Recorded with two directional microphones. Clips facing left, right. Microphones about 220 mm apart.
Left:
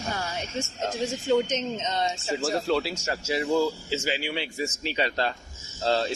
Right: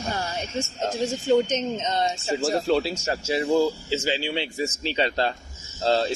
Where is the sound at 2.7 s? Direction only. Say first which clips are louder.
Right 3 dB; 25° right (ahead or behind).